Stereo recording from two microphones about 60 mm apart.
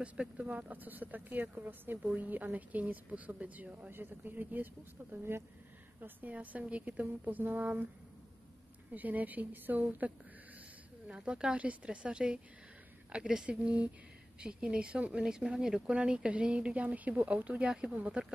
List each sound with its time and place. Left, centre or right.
0.0 s speech: centre
8.9 s speech: right
11.1 s speech: centre